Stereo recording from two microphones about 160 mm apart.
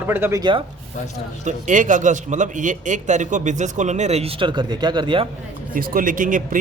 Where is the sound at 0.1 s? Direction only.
15° right (ahead or behind).